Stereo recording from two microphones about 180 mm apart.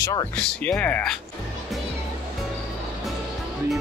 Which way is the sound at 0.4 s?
5° left (ahead or behind).